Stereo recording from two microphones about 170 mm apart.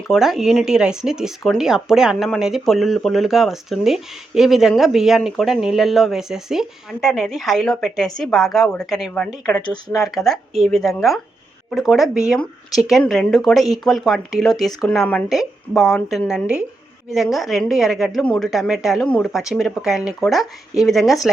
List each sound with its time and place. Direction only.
0.1 s speech: centre (ahead or behind)